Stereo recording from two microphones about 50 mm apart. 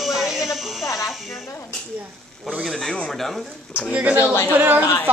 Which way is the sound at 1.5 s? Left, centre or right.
Left.